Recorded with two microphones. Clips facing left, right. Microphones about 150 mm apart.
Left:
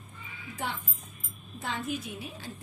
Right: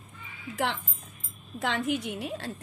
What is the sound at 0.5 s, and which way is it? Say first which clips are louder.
A woman's voice: right 6 dB; 90° right.